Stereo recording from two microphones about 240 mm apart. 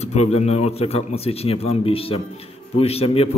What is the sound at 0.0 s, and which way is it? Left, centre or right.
A man's voice, left.